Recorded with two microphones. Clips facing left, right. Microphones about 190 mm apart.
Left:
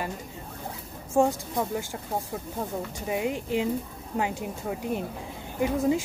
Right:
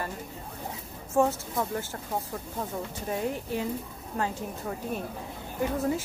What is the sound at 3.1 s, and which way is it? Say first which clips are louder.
Speech: left 3 dB; 15° left (ahead or behind).